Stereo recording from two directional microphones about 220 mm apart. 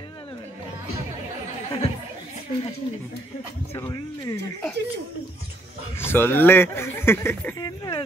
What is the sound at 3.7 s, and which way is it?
Speech, 15° left (ahead or behind).